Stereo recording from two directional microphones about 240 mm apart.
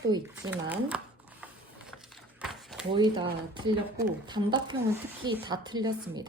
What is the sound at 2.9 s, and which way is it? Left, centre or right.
A woman's voice, centre.